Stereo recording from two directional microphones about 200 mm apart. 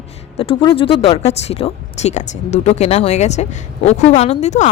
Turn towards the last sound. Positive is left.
turn(degrees=35)  # may be behind; listen again after turning